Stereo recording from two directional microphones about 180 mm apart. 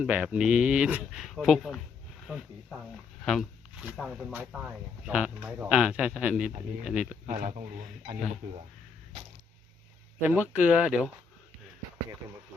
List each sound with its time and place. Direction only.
0.0 s speech: 5° right (ahead or behind)
7.3 s speech: 45° right (ahead or behind)
10.2 s speech: 10° right (ahead or behind)